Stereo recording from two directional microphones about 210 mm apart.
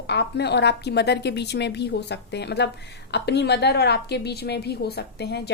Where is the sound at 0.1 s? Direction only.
55° left (ahead or behind).